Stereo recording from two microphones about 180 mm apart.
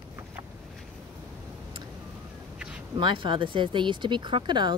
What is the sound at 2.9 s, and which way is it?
Speech, 25° right (ahead or behind).